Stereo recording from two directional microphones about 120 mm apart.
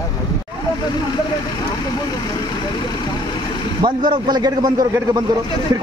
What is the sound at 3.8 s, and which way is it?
A man's voice, 40° right (ahead or behind).